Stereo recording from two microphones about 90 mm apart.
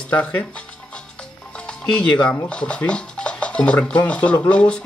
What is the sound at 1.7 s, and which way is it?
Music, 10° left (ahead or behind).